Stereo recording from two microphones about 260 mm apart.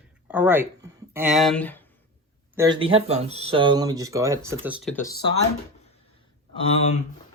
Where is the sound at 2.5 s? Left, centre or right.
Centre.